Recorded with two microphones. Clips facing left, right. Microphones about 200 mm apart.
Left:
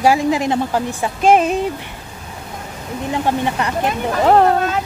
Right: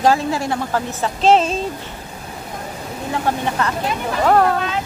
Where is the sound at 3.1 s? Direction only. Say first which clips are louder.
Left 2 dB; 15° left (ahead or behind).